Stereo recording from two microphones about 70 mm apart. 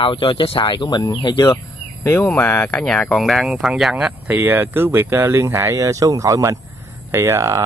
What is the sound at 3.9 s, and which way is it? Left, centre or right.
Speech, centre.